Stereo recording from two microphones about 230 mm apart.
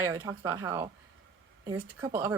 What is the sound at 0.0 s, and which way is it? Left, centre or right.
Speech, centre.